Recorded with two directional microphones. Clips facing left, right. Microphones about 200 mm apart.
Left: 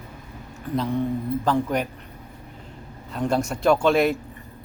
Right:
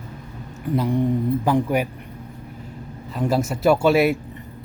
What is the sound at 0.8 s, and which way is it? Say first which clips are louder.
Speech: right 3 dB; 15° right (ahead or behind).